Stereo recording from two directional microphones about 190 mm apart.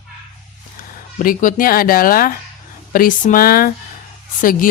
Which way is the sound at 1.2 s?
45° left (ahead or behind).